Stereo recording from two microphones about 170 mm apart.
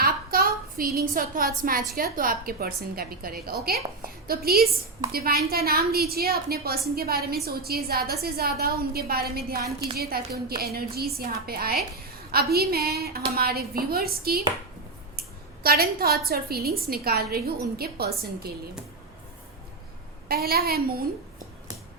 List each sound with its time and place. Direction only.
0.0 s a sound: 60° right (ahead or behind)
2.0 s a woman's voice: 60° right (ahead or behind)
15.6 s a woman's voice: 60° right (ahead or behind)
20.2 s a woman's voice: 65° right (ahead or behind)